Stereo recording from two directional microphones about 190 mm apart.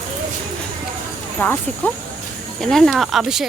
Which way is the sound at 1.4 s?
10° left (ahead or behind).